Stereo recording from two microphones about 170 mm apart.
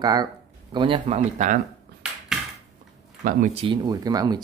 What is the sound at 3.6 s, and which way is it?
Speech, 25° right (ahead or behind).